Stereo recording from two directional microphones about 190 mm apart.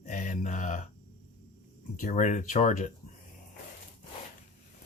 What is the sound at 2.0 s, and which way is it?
Speech, 40° left (ahead or behind).